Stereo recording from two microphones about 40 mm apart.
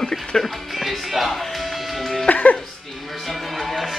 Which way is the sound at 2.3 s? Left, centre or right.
Left.